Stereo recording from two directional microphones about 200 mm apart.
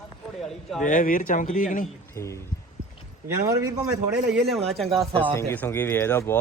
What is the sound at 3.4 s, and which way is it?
Speech, 15° right (ahead or behind).